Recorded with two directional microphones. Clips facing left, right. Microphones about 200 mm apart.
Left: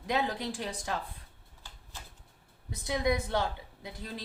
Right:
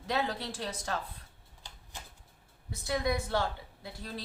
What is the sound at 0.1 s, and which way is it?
Speech, 15° left (ahead or behind).